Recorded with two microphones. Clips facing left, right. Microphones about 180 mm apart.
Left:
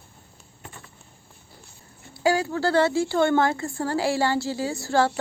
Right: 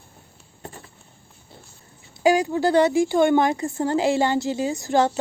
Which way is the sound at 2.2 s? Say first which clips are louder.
Right 4 dB; 15° right (ahead or behind).